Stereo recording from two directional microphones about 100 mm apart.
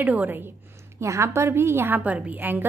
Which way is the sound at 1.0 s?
30° right (ahead or behind).